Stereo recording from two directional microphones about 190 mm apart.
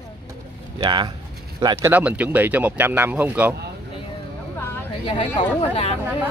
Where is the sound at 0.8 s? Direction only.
25° right (ahead or behind); by 3.5 s 10° right (ahead or behind).